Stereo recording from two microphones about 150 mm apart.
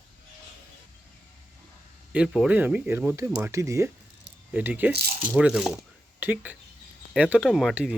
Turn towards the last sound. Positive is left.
turn(degrees=-5)  # may be behind; listen again after turning